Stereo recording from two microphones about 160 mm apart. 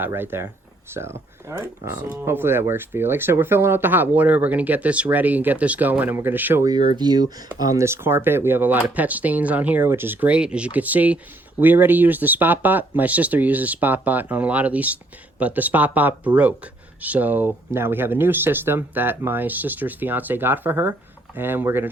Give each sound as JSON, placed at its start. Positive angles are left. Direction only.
{"t": 0.0, "sound": "speech", "side_deg": -15}